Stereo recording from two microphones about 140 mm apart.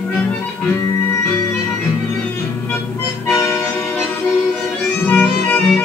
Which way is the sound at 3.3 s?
15° left (ahead or behind).